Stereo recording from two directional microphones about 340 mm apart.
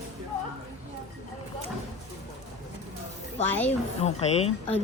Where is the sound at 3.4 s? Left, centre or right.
Centre.